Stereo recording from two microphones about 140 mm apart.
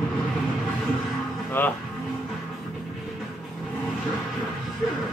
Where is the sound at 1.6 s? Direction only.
15° left (ahead or behind).